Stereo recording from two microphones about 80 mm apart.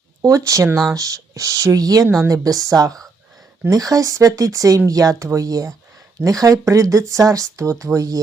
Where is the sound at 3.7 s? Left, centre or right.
Right.